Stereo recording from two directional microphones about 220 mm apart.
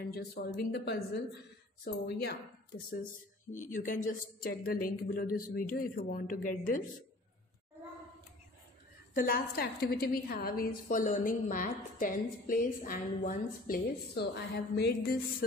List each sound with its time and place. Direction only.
0.1 s speech: 45° left (ahead or behind)
3.5 s a woman's voice: 35° left (ahead or behind)
9.1 s a woman's voice: 40° left (ahead or behind)